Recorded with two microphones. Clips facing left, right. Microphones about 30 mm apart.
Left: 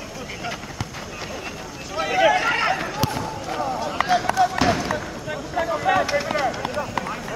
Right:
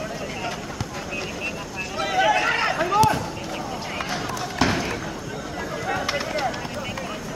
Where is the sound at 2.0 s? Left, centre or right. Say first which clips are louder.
Left 2 dB; centre.